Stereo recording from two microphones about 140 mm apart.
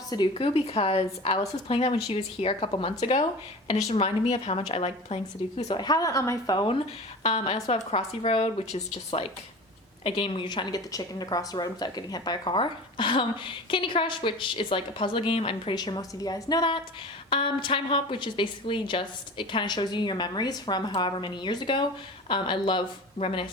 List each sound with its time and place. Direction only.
0.1 s a woman's voice: 35° left (ahead or behind)
3.0 s a woman's voice: 55° left (ahead or behind)
5.7 s a woman's voice: 30° left (ahead or behind)
7.2 s a woman's voice: 45° left (ahead or behind)